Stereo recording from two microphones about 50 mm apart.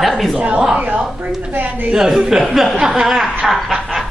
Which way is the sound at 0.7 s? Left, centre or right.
Right.